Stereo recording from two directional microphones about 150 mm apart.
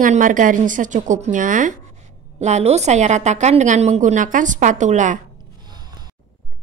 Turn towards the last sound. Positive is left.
turn(degrees=-30)  # may be behind; listen again after turning